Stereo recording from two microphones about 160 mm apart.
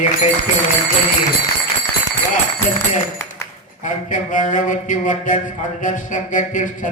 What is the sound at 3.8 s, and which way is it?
A man's voice, 50° left (ahead or behind).